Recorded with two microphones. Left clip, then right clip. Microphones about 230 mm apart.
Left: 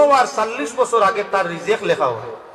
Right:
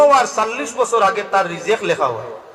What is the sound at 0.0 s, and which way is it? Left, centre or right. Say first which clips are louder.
A man's voice: right 2 dB; right.